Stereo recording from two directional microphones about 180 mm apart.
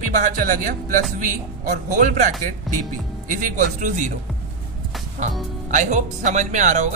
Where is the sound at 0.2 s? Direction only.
50° right (ahead or behind).